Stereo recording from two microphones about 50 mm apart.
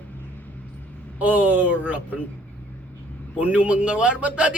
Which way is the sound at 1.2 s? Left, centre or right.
Right.